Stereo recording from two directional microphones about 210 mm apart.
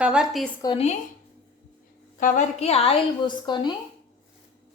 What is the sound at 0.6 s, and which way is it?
Speech, 20° left (ahead or behind).